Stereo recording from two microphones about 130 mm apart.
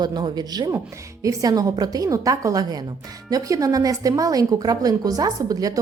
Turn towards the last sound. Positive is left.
turn(degrees=-30)  # may be behind; listen again after turning